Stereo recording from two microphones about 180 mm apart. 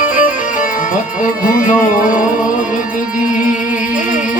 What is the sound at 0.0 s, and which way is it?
Music, 45° left (ahead or behind).